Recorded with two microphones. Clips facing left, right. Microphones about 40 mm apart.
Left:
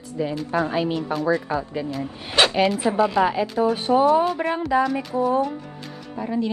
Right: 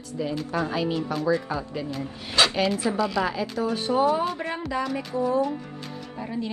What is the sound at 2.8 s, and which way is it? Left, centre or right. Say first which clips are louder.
Speech: left 5 dB; left.